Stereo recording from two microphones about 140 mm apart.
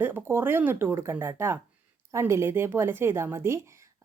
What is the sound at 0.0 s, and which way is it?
Speech, 15° right (ahead or behind).